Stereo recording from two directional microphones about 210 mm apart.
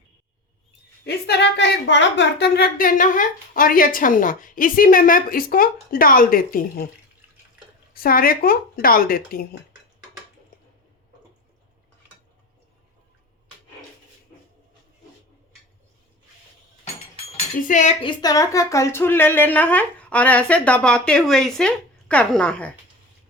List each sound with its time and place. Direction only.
1.0 s a woman's voice: 50° left (ahead or behind)
7.9 s a woman's voice: 45° left (ahead or behind)
17.6 s speech: 35° left (ahead or behind)
18.0 s speech: 20° left (ahead or behind)